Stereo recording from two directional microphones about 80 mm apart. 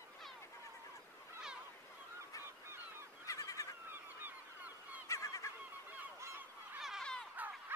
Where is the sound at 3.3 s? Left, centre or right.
Left.